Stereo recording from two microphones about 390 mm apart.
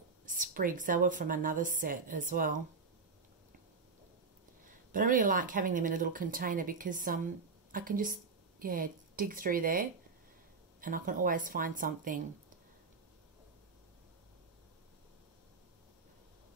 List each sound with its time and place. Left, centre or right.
0.3 s a woman's voice: right
4.9 s a woman's voice: right